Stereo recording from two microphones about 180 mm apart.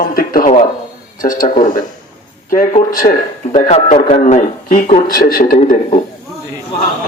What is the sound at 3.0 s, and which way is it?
Speech, 30° left (ahead or behind).